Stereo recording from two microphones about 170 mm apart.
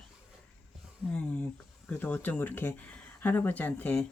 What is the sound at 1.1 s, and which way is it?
Speech, 5° left (ahead or behind).